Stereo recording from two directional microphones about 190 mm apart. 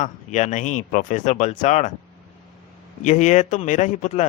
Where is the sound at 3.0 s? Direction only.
40° left (ahead or behind).